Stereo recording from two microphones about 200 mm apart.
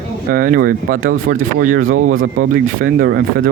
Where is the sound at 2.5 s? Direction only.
50° right (ahead or behind).